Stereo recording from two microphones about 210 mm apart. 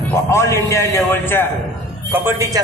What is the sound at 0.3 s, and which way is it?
A man's voice, 15° left (ahead or behind).